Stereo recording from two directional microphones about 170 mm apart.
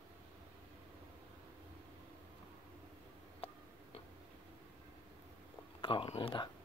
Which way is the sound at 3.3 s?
35° left (ahead or behind).